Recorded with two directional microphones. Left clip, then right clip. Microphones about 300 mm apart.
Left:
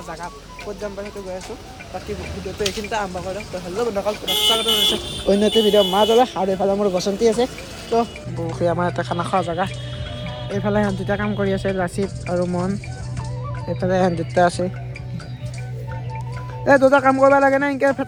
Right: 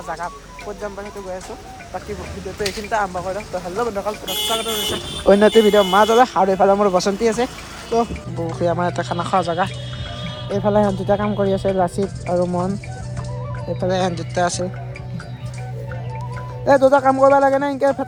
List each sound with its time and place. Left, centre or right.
0.7 s speech: centre
2.6 s speech: centre
5.2 s speech: right
7.2 s speech: centre
16.6 s speech: centre